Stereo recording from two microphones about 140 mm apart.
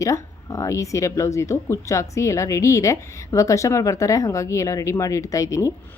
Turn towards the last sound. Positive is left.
turn(degrees=20)  # may be behind; listen again after turning